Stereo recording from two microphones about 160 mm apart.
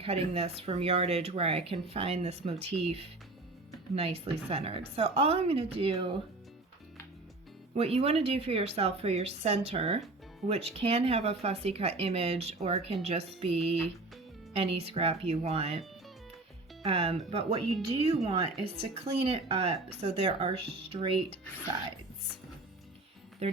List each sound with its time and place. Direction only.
0.0 s speech: 40° right (ahead or behind)
7.8 s speech: 40° right (ahead or behind)
16.8 s speech: 40° right (ahead or behind)
23.4 s speech: 40° right (ahead or behind)